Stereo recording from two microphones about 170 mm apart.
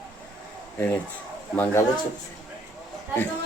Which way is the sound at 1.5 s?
10° left (ahead or behind).